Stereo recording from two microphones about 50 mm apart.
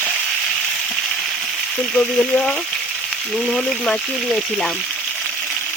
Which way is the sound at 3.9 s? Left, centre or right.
Centre.